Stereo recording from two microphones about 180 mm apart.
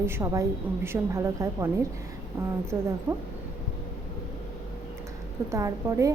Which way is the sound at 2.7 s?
15° right (ahead or behind).